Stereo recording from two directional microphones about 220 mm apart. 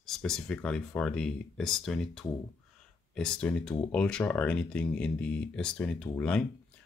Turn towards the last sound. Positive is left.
turn(degrees=5)  # may be behind; listen again after turning